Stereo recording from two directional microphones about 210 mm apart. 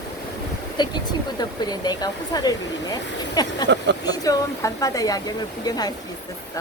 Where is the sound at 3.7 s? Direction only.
55° right (ahead or behind).